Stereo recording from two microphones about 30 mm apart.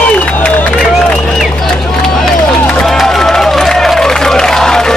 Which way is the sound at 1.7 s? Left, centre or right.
Left.